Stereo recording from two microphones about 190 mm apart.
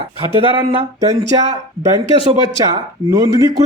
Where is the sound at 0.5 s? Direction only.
25° right (ahead or behind).